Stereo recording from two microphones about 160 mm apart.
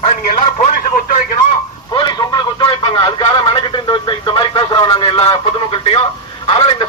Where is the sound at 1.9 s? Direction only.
25° left (ahead or behind).